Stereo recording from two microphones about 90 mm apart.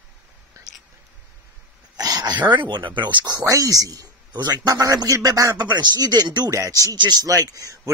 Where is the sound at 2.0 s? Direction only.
45° right (ahead or behind).